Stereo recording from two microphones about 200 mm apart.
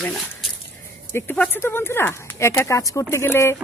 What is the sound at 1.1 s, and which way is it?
Speech, 10° left (ahead or behind).